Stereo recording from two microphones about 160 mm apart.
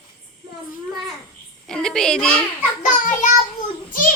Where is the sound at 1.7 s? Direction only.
5° left (ahead or behind).